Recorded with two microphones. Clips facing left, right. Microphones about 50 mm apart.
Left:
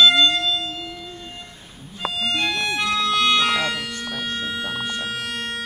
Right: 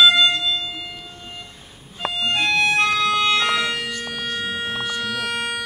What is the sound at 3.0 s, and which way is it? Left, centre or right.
Organ, centre.